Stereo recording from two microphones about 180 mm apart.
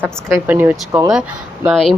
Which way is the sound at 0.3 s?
10° right (ahead or behind).